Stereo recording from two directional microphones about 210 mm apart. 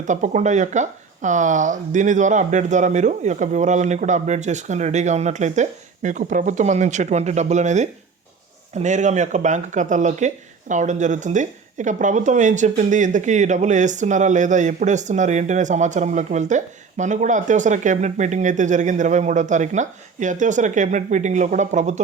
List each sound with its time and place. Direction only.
0.0 s speech: 35° right (ahead or behind)